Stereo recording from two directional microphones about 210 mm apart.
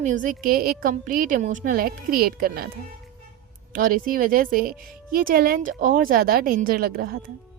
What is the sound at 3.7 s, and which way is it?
Speech, 40° right (ahead or behind).